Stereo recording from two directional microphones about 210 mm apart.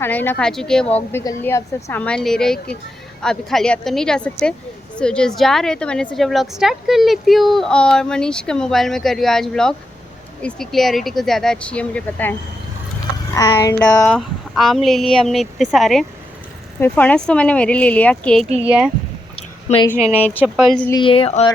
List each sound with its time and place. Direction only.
0.0 s a woman's voice: 10° left (ahead or behind)
14.0 s a woman's voice: centre (ahead or behind)
19.4 s a sound: 25° left (ahead or behind)
20.1 s a woman's voice: 5° left (ahead or behind)
20.9 s speech: 25° left (ahead or behind)